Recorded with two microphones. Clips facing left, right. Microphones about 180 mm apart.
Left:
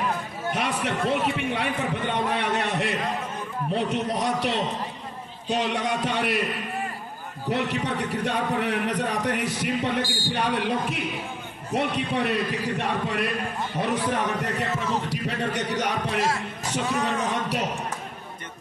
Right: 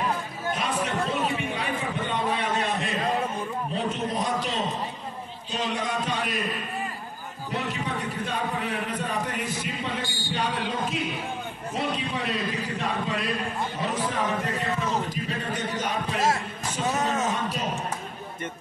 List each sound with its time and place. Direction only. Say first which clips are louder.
0.6 s a man's voice: left 1 dB; 70° left (ahead or behind)
2.3 s a sound: left 1 dB; 65° left (ahead or behind)
3.7 s a man's voice: left 4 dB; 70° left (ahead or behind)
7.5 s a man's voice: left 4 dB; 75° left (ahead or behind)
16.9 s speech: even; 40° right (ahead or behind)
17.3 s a sound: left 2 dB; 75° left (ahead or behind)